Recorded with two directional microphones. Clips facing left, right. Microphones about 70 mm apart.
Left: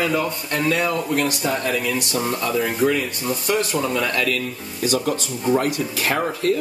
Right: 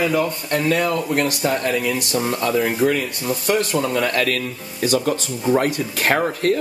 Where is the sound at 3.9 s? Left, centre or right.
Right.